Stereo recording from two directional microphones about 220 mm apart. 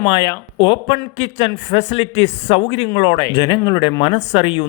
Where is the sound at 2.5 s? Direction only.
55° left (ahead or behind).